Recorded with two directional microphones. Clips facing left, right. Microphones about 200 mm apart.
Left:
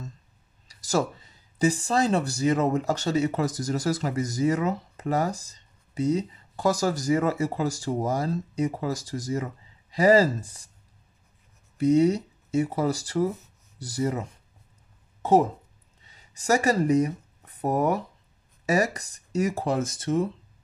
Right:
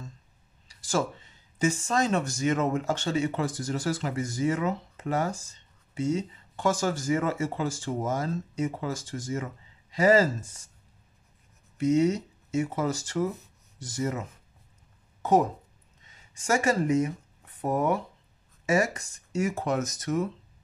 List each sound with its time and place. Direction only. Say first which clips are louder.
0.7 s speech: left 3 dB; 40° left (ahead or behind)
11.8 s speech: left 3 dB; 35° left (ahead or behind)
16.0 s speech: left 2 dB; 35° left (ahead or behind)